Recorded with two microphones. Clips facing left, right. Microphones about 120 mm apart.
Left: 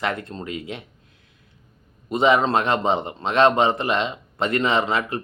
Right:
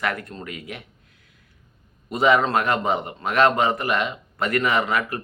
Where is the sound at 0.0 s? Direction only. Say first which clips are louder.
Left 1 dB; 25° left (ahead or behind).